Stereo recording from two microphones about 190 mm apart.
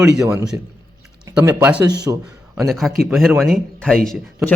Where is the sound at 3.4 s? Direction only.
5° left (ahead or behind).